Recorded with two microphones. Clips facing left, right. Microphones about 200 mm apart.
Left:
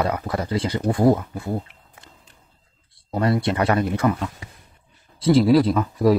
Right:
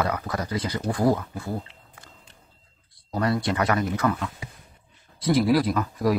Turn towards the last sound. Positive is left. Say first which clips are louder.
# left 5 dB
turn(degrees=25)  # may be behind; listen again after turning